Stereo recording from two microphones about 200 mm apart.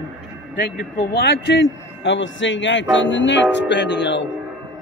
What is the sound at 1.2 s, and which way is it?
A man's voice, 55° left (ahead or behind).